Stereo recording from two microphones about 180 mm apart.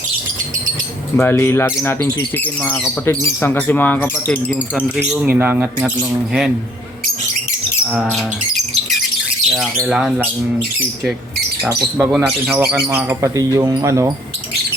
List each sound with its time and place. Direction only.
1.2 s speech: 15° left (ahead or behind)
4.7 s speech: 5° right (ahead or behind)
9.5 s speech: centre (ahead or behind)
11.6 s speech: 10° right (ahead or behind)